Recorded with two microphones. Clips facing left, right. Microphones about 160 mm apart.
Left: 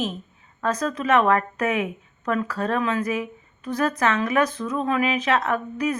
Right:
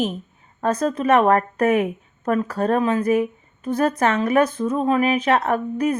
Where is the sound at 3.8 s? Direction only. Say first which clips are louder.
Right 3 dB; 35° right (ahead or behind).